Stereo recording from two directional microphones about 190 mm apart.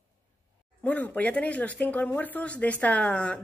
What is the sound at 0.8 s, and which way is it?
Speech, 10° left (ahead or behind).